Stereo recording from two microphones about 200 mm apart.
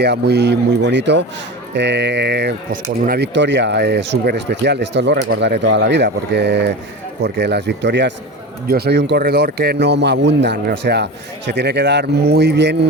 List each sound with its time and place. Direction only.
0.0 s speech: 55° right (ahead or behind)
8.6 s speech: 50° right (ahead or behind)